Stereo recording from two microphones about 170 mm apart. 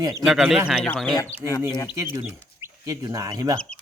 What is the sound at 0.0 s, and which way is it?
Speech, 20° right (ahead or behind).